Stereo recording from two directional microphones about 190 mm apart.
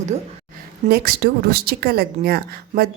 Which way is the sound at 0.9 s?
55° right (ahead or behind).